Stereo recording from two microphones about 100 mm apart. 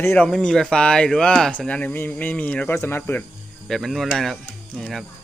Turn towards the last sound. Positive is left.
turn(degrees=5)  # may be behind; listen again after turning